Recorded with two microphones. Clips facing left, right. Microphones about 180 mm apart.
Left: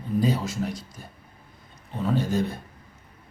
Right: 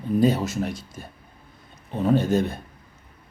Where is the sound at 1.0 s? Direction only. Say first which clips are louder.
Right 4 dB; 70° right (ahead or behind).